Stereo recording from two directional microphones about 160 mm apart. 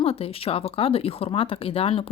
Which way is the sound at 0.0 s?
35° left (ahead or behind).